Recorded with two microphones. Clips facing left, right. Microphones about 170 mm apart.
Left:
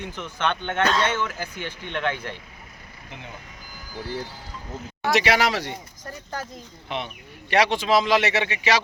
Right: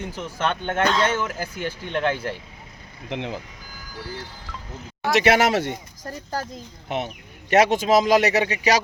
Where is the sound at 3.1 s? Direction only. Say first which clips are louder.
Right 12 dB; 85° right.